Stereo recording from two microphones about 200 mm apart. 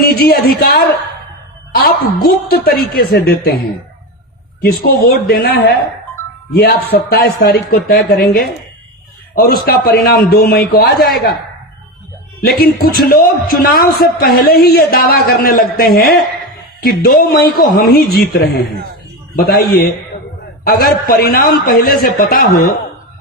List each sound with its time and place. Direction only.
0.0 s a man's voice: 50° left (ahead or behind)
4.6 s a man's voice: 50° left (ahead or behind)
12.5 s a man's voice: 50° left (ahead or behind)
20.7 s a man's voice: 50° left (ahead or behind)